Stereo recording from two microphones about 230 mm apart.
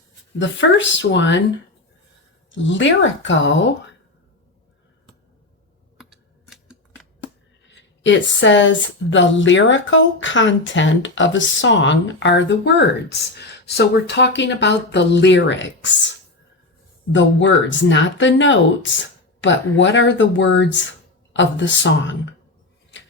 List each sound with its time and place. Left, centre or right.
0.3 s a woman's voice: left
2.5 s a woman's voice: left
6.0 s typing: centre
7.7 s a woman's voice: left